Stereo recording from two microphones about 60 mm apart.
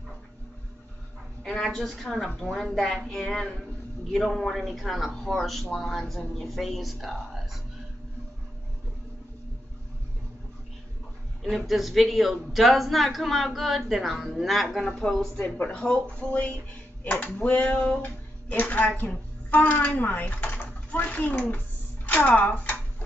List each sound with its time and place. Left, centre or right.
1.4 s speech: centre
11.4 s speech: centre
15.0 s speech: centre